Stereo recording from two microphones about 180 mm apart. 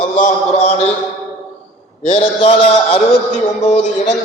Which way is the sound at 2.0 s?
35° left (ahead or behind).